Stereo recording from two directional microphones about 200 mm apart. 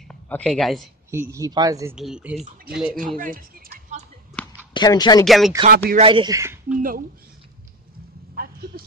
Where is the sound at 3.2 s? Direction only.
45° right (ahead or behind).